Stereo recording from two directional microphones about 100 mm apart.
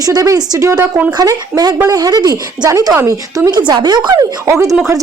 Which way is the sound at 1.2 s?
40° right (ahead or behind).